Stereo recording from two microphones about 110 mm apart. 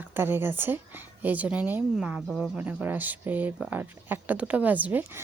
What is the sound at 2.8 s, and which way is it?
A woman's voice, 15° right (ahead or behind).